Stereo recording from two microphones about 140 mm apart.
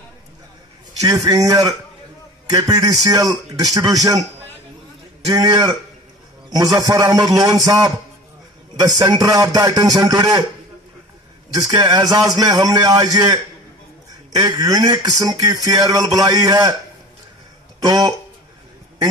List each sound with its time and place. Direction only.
1.0 s music: 30° right (ahead or behind)
5.3 s music: 30° right (ahead or behind)
11.7 s music: 30° right (ahead or behind)
17.8 s music: 30° right (ahead or behind)